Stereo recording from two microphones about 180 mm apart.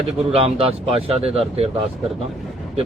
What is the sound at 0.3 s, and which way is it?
Speech, 35° right (ahead or behind).